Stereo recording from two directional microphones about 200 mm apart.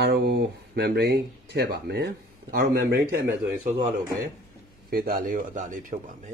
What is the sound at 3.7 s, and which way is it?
Speech, 20° right (ahead or behind).